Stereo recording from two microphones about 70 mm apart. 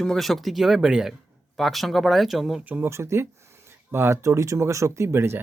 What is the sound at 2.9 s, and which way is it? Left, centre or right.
Speech, right.